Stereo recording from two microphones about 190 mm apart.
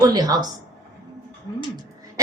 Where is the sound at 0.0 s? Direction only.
20° right (ahead or behind).